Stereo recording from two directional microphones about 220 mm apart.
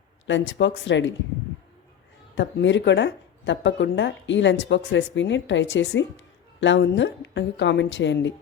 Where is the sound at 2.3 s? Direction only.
55° left (ahead or behind).